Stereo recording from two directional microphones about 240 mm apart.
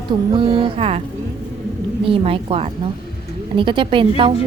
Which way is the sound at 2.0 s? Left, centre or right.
Right.